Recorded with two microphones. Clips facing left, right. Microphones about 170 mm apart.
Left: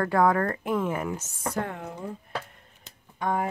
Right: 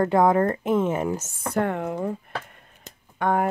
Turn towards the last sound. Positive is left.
turn(degrees=-65)  # may be behind; listen again after turning